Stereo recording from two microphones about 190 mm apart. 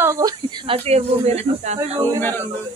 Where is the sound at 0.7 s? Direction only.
35° right (ahead or behind).